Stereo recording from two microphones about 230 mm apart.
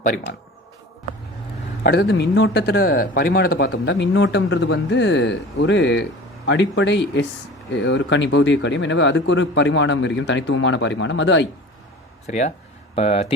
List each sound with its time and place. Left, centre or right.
1.8 s speech: left
12.2 s speech: left